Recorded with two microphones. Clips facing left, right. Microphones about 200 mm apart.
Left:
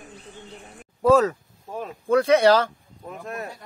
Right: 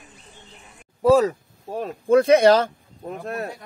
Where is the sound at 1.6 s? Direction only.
35° right (ahead or behind).